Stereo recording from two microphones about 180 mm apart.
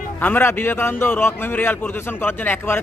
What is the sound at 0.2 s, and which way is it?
A man's voice, 10° left (ahead or behind).